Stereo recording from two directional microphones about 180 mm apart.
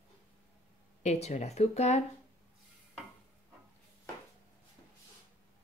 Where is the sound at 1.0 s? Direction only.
40° left (ahead or behind).